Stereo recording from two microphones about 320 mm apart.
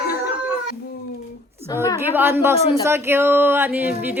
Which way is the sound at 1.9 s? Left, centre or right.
Centre.